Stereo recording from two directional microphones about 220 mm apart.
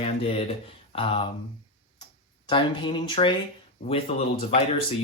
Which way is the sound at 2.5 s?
20° left (ahead or behind).